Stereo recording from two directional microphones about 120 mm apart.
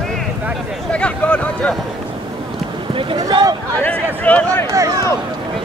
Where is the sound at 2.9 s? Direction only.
45° right (ahead or behind).